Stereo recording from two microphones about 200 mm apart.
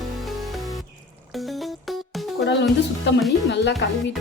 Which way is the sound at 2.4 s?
60° left (ahead or behind).